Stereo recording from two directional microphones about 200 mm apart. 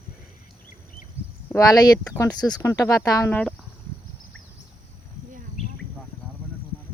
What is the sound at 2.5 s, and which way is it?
Speech, 15° left (ahead or behind).